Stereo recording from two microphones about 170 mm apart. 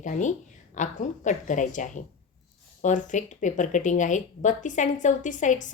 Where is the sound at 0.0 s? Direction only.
50° left (ahead or behind).